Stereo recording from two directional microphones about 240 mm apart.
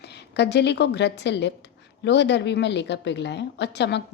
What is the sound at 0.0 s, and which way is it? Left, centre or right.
A woman's voice, left.